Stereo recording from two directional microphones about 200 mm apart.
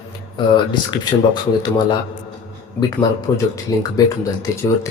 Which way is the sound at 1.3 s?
20° left (ahead or behind).